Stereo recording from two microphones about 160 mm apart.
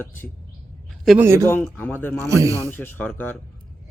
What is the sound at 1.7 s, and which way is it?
Speech, 15° left (ahead or behind).